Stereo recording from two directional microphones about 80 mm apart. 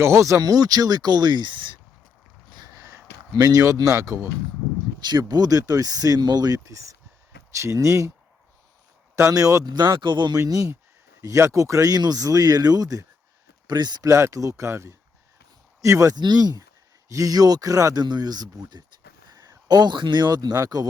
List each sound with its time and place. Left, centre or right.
0.0 s speech: right
2.7 s speech: right
5.0 s speech: right
9.3 s speech: right
9.6 s speech: right
10.3 s speech: right
13.7 s speech: right
14.1 s speech: right
16.1 s speech: right
17.1 s speech: right
18.0 s speech: right